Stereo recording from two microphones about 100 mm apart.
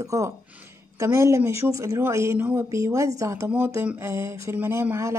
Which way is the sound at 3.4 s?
20° right (ahead or behind).